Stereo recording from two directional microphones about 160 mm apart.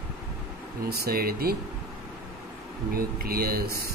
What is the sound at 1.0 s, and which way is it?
Speech, 70° right (ahead or behind).